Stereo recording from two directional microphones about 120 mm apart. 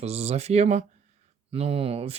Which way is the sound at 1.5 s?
55° right (ahead or behind).